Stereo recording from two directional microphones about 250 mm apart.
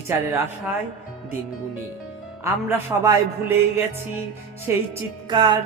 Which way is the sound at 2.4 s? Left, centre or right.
Centre.